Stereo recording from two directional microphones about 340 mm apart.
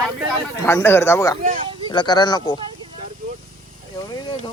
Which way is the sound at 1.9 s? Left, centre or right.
Centre.